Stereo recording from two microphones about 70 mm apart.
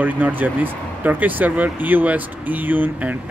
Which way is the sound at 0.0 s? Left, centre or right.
Right.